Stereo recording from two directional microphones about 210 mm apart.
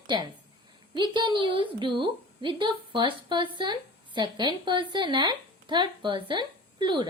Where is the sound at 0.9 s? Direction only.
20° right (ahead or behind).